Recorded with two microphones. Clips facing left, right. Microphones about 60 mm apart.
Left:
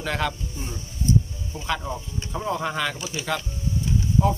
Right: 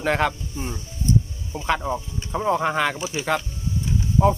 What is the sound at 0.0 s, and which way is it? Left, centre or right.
Speech, right.